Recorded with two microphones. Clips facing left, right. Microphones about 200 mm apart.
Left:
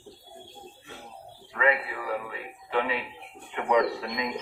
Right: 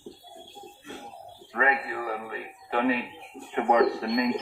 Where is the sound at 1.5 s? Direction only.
45° right (ahead or behind).